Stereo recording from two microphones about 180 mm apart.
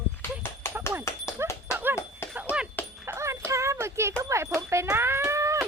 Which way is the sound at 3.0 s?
15° right (ahead or behind).